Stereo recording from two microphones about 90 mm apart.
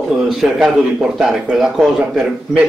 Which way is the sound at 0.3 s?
Centre (ahead or behind).